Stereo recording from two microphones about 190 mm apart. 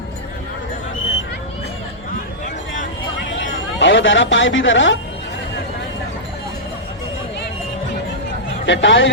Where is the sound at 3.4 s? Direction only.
75° left (ahead or behind).